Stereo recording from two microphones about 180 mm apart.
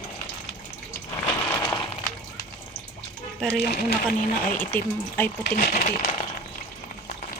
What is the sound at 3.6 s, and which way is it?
Speech, 65° left (ahead or behind).